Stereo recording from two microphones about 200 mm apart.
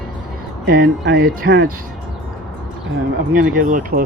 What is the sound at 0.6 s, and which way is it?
Speech, 55° right (ahead or behind).